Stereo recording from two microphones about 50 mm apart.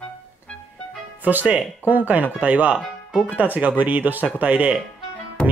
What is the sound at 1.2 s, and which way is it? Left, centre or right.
Speech, right.